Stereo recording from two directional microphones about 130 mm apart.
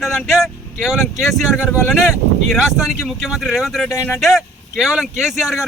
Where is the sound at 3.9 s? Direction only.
20° left (ahead or behind).